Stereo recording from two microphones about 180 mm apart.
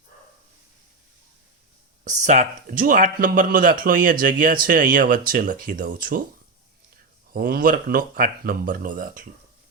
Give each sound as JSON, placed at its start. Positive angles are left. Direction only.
{"t": 2.0, "sound": "speech", "side_deg": -40}
{"t": 7.3, "sound": "speech", "side_deg": -55}